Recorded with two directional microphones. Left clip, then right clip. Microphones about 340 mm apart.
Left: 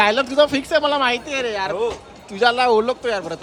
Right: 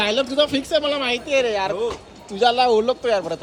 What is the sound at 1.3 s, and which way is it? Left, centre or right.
Speech, centre.